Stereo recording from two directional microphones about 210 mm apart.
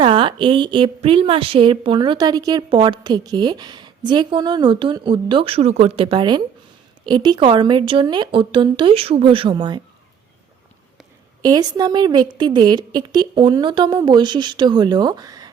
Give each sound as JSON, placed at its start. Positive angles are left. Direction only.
{"t": 0.0, "sound": "a woman's voice", "side_deg": -25}
{"t": 11.4, "sound": "a woman's voice", "side_deg": -20}